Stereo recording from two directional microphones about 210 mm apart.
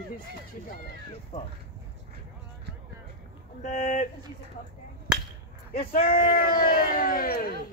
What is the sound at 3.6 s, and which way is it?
Speech, 40° left (ahead or behind).